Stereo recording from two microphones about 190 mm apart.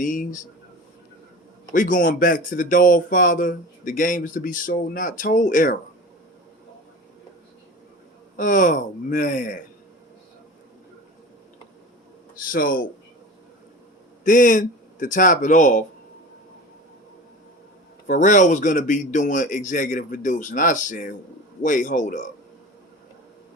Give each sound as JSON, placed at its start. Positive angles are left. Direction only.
{"t": 0.0, "sound": "speech", "side_deg": 45}
{"t": 1.7, "sound": "speech", "side_deg": 45}
{"t": 8.4, "sound": "speech", "side_deg": 45}
{"t": 12.5, "sound": "speech", "side_deg": 45}
{"t": 14.3, "sound": "speech", "side_deg": 45}
{"t": 18.1, "sound": "a man's voice", "side_deg": 40}